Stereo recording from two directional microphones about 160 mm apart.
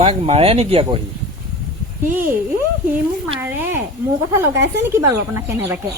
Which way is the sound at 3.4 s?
15° right (ahead or behind).